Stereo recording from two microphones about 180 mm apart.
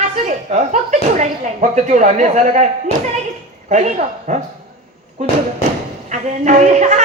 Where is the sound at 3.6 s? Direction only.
40° right (ahead or behind).